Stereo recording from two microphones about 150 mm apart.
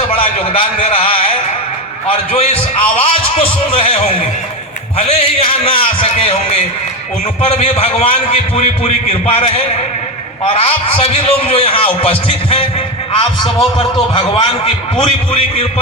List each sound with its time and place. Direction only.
0.2 s a sound: 40° left (ahead or behind)
2.0 s a man's voice: 45° left (ahead or behind)
13.7 s a man's voice: 30° left (ahead or behind)